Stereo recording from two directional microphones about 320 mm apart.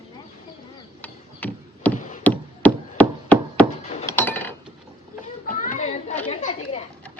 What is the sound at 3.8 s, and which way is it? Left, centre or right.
Glass, centre.